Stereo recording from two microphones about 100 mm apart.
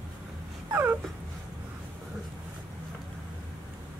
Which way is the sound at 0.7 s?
20° right (ahead or behind).